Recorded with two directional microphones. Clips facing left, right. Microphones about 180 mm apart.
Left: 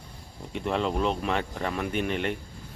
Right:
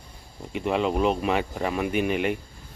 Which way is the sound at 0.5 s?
5° right (ahead or behind).